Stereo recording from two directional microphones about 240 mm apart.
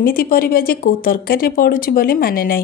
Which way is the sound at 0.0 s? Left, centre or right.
Left.